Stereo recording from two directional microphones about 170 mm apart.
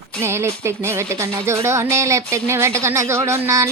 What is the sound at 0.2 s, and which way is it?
Speech, 15° right (ahead or behind).